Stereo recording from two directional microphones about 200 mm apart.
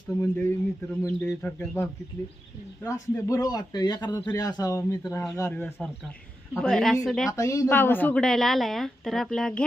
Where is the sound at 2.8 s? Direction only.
15° left (ahead or behind).